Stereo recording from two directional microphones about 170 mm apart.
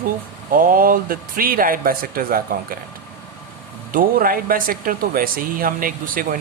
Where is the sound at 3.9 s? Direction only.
55° right (ahead or behind).